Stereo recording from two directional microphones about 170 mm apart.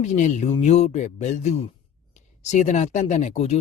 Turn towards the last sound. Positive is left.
turn(degrees=40)  # may be behind; listen again after turning